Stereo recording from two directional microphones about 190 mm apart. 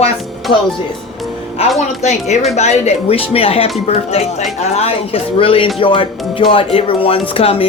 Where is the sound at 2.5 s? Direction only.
35° left (ahead or behind).